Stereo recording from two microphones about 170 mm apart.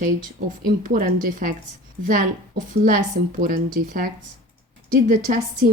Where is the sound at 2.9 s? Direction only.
50° right (ahead or behind).